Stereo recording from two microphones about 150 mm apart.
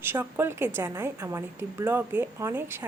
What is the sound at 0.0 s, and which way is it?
Speech, 15° right (ahead or behind).